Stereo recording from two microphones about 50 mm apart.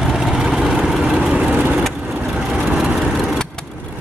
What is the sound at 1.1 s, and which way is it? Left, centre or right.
Vehicle, centre.